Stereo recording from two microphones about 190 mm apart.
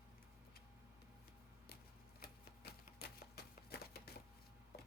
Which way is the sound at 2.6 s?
55° left (ahead or behind).